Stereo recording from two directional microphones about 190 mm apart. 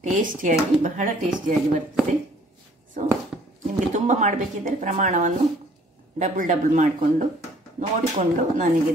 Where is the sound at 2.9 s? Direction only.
40° right (ahead or behind).